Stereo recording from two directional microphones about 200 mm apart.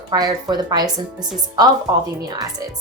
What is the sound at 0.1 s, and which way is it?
Speech, 20° right (ahead or behind).